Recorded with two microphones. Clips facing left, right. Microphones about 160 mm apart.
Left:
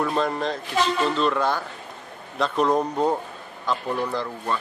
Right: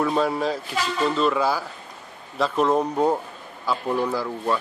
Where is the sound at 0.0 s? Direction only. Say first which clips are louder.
Right 2 dB; 5° right (ahead or behind).